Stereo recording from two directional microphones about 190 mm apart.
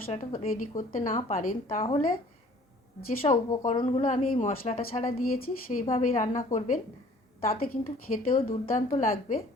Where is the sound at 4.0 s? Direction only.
40° left (ahead or behind).